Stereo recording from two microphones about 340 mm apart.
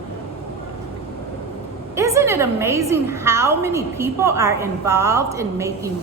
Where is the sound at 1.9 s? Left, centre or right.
Centre.